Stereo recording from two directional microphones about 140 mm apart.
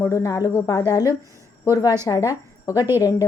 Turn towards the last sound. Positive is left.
turn(degrees=25)  # may be behind; listen again after turning